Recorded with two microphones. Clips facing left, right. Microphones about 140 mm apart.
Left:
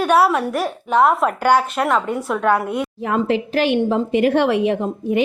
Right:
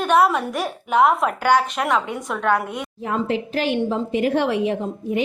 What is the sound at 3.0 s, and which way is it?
A woman's voice, 75° left (ahead or behind).